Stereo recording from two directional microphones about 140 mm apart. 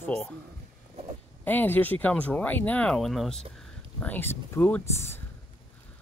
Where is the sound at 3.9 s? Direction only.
15° left (ahead or behind).